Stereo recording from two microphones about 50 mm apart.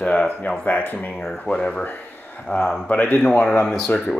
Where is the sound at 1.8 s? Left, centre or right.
Left.